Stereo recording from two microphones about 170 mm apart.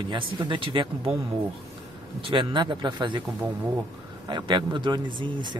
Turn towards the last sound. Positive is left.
turn(degrees=-25)  # may be behind; listen again after turning